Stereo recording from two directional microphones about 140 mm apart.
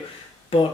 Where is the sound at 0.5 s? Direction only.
40° left (ahead or behind).